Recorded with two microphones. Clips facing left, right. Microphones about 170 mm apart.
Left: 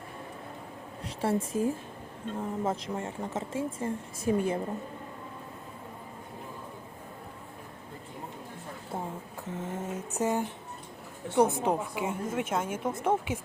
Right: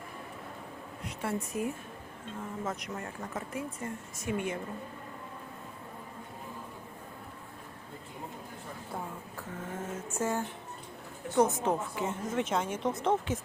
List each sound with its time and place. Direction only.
1.0 s speech: 30° left (ahead or behind)
9.5 s a sound: 20° left (ahead or behind)
11.3 s a woman's voice: 15° left (ahead or behind)